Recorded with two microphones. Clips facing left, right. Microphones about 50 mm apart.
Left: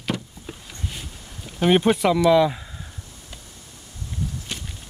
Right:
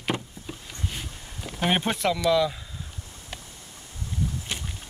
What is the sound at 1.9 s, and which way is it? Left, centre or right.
Speech, centre.